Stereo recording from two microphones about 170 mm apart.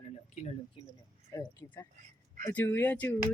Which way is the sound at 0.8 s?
30° left (ahead or behind).